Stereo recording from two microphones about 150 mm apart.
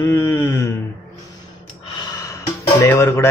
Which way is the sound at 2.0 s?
20° left (ahead or behind).